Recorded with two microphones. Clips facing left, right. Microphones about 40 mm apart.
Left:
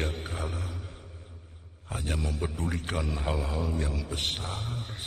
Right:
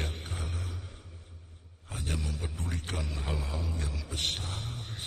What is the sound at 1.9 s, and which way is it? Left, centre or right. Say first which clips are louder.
A man's voice: left 4 dB; centre.